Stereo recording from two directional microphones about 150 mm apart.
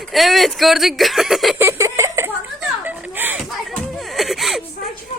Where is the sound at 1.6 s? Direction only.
20° right (ahead or behind).